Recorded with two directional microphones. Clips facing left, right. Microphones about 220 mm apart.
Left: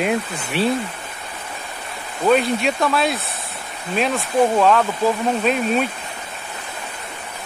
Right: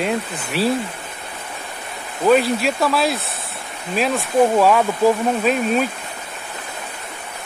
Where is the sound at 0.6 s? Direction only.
Centre (ahead or behind).